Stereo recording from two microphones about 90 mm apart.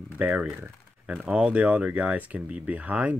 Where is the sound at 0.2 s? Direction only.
15° right (ahead or behind).